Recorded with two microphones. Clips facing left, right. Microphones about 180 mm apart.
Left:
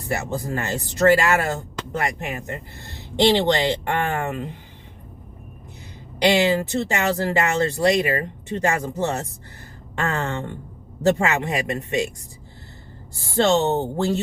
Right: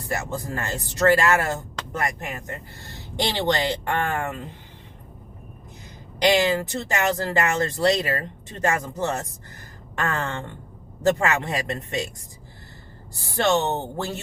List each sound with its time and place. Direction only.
0.1 s speech: 20° left (ahead or behind)
6.3 s speech: 20° left (ahead or behind)
13.3 s speech: 20° left (ahead or behind)